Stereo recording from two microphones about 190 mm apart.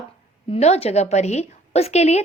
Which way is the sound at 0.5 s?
35° left (ahead or behind).